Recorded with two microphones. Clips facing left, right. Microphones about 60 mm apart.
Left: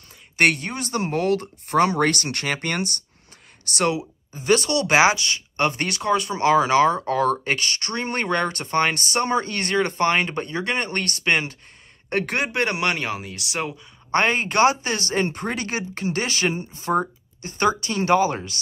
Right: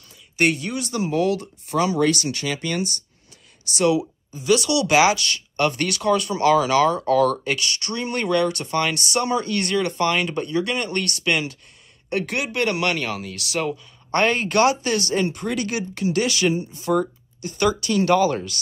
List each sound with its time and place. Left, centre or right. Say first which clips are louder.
0.6 s speech: right 1 dB; left
4.3 s speech: even; left
12.5 s speech: right 3 dB; left